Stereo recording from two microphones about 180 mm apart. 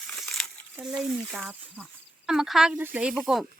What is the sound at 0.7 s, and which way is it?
Speech, 5° right (ahead or behind).